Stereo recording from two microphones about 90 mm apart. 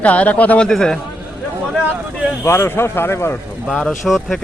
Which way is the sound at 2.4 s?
30° left (ahead or behind).